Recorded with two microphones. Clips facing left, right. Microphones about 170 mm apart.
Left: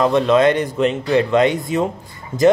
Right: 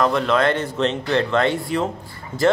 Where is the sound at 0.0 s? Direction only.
20° left (ahead or behind).